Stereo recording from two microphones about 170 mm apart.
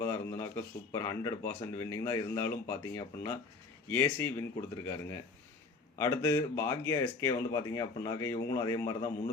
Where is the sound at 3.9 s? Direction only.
15° left (ahead or behind).